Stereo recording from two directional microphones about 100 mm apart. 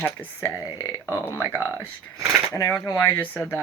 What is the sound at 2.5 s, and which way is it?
Speech, 30° left (ahead or behind).